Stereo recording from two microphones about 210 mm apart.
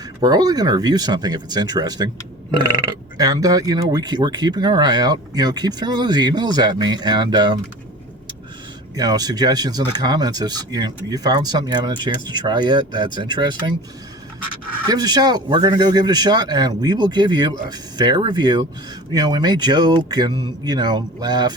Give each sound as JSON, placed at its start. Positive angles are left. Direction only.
{"t": 0.2, "sound": "speech", "side_deg": -20}
{"t": 9.0, "sound": "speech", "side_deg": -20}
{"t": 14.8, "sound": "speech", "side_deg": -20}